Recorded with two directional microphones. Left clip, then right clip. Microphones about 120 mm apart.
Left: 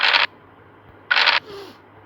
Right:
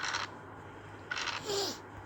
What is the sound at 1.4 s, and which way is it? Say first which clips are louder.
Coin: right 2 dB; 35° right (ahead or behind).